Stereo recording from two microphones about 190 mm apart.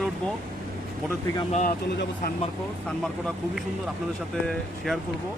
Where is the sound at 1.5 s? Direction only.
40° left (ahead or behind).